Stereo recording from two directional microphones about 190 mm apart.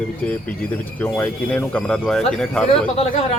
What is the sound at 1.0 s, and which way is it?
A man's voice, 10° left (ahead or behind).